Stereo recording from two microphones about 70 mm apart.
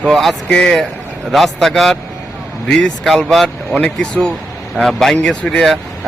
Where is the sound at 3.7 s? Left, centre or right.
Centre.